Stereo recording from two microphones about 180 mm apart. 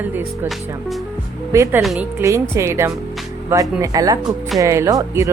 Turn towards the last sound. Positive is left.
turn(degrees=-20)  # may be behind; listen again after turning